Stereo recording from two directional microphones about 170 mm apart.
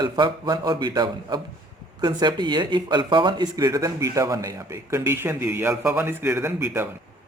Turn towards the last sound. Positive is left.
turn(degrees=-10)  # may be behind; listen again after turning